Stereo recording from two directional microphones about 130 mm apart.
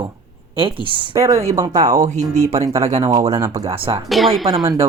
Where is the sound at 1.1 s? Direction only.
25° right (ahead or behind).